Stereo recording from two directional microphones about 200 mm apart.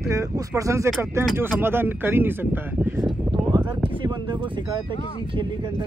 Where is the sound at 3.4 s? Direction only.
20° right (ahead or behind).